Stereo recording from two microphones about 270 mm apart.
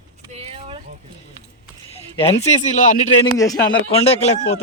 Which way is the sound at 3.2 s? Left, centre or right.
Centre.